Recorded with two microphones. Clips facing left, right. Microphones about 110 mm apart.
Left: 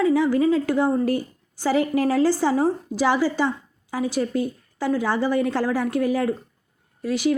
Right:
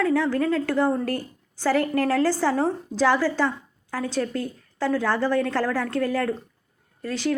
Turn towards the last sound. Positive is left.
turn(degrees=10)  # may be behind; listen again after turning